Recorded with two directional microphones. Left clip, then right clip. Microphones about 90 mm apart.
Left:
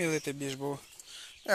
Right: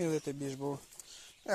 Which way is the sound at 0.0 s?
10° right (ahead or behind).